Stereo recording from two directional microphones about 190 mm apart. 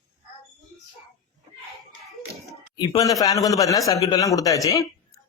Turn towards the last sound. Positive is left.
turn(degrees=15)  # may be behind; listen again after turning